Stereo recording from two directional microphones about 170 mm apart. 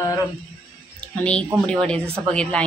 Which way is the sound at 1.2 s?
5° left (ahead or behind).